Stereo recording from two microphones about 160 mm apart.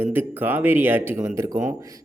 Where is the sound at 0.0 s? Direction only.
10° right (ahead or behind).